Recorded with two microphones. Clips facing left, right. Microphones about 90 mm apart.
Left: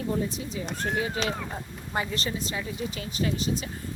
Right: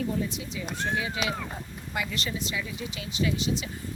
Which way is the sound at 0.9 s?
40° left (ahead or behind).